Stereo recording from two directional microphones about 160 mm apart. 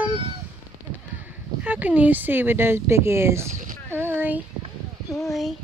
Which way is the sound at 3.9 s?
10° right (ahead or behind).